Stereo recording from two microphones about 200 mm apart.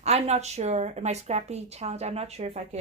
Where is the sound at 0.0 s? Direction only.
30° right (ahead or behind).